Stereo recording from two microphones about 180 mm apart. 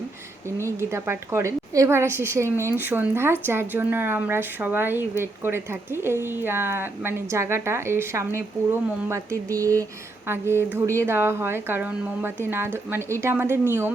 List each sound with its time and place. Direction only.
0.8 s a woman's voice: 15° right (ahead or behind)